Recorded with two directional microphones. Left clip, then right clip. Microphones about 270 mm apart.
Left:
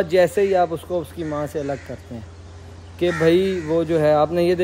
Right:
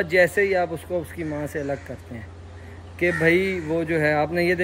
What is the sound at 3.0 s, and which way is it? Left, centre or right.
Speech, centre.